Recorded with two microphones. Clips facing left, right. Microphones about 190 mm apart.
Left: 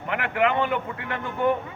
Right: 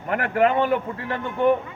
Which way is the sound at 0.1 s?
40° right (ahead or behind).